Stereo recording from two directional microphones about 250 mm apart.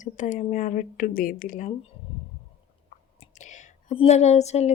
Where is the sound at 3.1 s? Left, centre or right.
Left.